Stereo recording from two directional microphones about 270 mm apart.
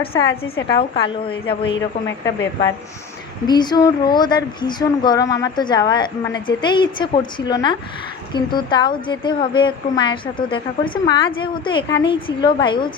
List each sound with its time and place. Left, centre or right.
1.1 s a woman's voice: centre
1.6 s a woman's voice: left
3.4 s a woman's voice: centre